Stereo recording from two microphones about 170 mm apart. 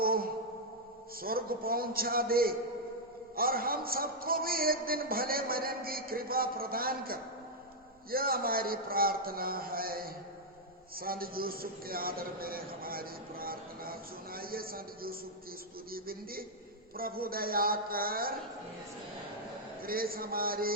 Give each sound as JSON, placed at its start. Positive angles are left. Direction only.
{"t": 0.0, "sound": "a sound", "side_deg": -60}
{"t": 1.2, "sound": "a man's voice", "side_deg": -60}
{"t": 19.8, "sound": "a man's voice", "side_deg": -60}